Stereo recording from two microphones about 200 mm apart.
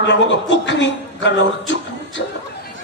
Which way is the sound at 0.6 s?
65° left (ahead or behind).